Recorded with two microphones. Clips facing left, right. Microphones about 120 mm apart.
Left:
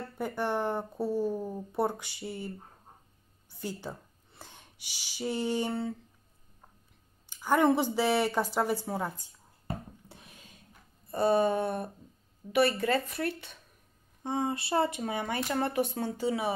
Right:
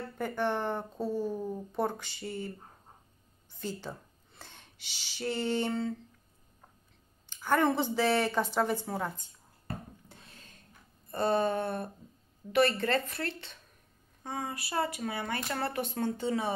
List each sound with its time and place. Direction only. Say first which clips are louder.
0.2 s speech: left 1 dB; 10° left (ahead or behind)
3.5 s speech: even; 15° left (ahead or behind)
7.2 s speech: left 2 dB; 10° left (ahead or behind)
9.7 s a sound: left 3 dB; 15° left (ahead or behind)
11.1 s speech: left 3 dB; 10° left (ahead or behind)
14.2 s speech: left 6 dB; 25° left (ahead or behind)